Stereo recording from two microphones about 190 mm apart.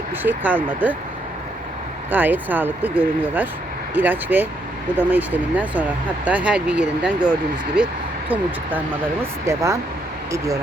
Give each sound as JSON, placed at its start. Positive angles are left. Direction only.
{"t": 0.2, "sound": "speech", "side_deg": -10}
{"t": 2.0, "sound": "speech", "side_deg": -10}
{"t": 9.2, "sound": "speech", "side_deg": -15}